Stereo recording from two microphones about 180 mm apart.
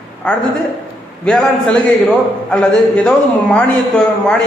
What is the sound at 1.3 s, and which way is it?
Speech, 5° left (ahead or behind).